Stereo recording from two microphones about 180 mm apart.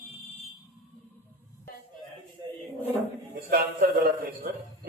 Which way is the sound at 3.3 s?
55° right (ahead or behind).